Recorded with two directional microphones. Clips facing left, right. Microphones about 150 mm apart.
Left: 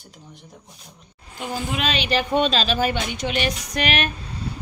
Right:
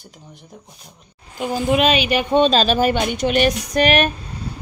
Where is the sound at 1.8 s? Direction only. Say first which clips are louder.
Right 3 dB; 15° right (ahead or behind).